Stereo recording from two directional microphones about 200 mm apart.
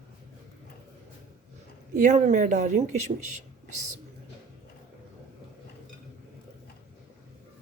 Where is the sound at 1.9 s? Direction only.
40° right (ahead or behind).